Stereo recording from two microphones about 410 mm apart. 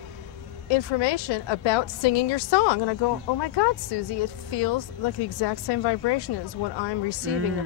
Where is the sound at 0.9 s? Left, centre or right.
Left.